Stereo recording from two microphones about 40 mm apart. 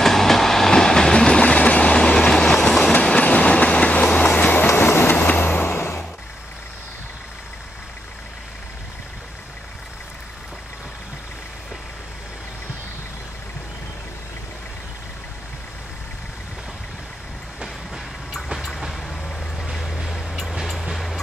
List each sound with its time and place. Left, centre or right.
0.0 s train: centre
1.4 s train: left
1.9 s train: left
4.7 s train: left
5.1 s vehicle: left
5.4 s vehicle: left
18.8 s vehicle: centre
20.8 s music: centre